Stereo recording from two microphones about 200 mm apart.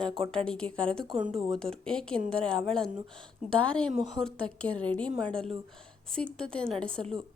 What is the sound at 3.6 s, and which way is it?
A woman's voice, 5° left (ahead or behind).